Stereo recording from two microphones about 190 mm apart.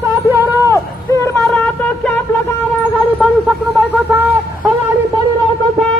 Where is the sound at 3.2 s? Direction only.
10° left (ahead or behind).